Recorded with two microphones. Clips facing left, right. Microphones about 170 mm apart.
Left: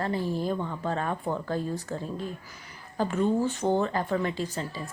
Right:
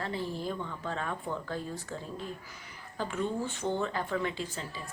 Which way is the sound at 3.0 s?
40° left (ahead or behind).